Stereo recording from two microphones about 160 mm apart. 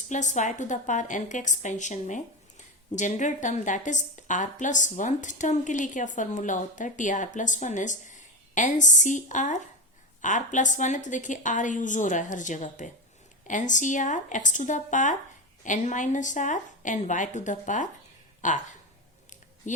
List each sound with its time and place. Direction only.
0.1 s a woman's voice: 50° left (ahead or behind)
19.6 s a woman's voice: 50° left (ahead or behind)